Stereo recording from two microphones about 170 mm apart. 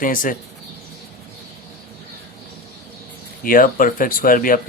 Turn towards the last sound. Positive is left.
turn(degrees=55)  # may be behind; listen again after turning